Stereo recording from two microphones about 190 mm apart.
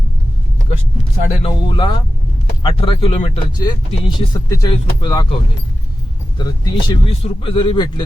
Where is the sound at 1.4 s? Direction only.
25° left (ahead or behind).